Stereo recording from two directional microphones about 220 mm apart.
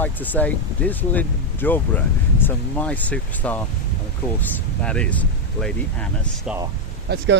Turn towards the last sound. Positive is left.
turn(degrees=-55)  # may be behind; listen again after turning